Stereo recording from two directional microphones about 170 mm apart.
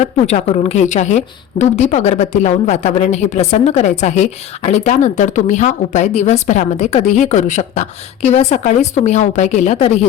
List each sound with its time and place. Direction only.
0.0 s a woman's voice: 40° left (ahead or behind)